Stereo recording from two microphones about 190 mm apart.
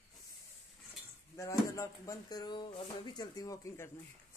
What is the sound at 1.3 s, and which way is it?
A woman's voice, 15° left (ahead or behind).